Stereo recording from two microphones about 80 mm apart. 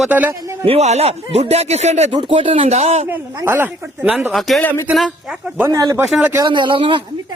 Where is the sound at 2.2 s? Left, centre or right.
Right.